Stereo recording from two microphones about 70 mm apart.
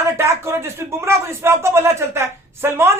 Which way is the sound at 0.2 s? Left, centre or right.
Right.